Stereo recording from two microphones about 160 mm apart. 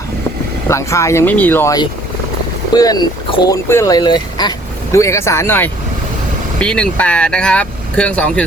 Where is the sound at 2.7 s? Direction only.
25° left (ahead or behind).